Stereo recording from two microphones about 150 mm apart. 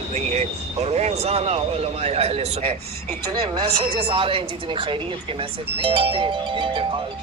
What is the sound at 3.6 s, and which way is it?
A woman's voice, 35° right (ahead or behind).